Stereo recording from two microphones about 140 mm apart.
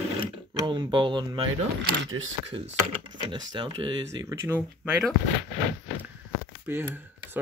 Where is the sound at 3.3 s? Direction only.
35° right (ahead or behind).